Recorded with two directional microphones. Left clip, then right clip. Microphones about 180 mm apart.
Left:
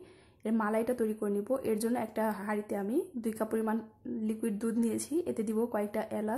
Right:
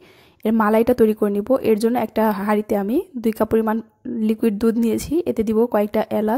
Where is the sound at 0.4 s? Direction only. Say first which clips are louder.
Right 14 dB; 45° right (ahead or behind).